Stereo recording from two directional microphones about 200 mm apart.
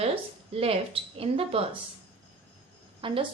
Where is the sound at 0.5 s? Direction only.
30° right (ahead or behind).